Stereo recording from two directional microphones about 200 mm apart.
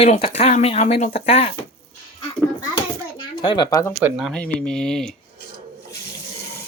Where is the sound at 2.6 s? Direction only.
20° left (ahead or behind).